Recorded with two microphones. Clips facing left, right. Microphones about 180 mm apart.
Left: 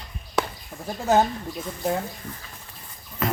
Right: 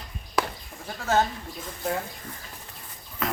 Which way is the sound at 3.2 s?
Centre (ahead or behind).